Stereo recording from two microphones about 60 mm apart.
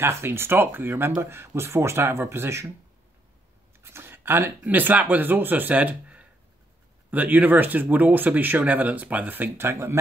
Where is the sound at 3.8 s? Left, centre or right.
Right.